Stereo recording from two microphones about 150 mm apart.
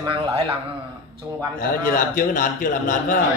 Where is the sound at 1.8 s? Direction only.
65° left (ahead or behind).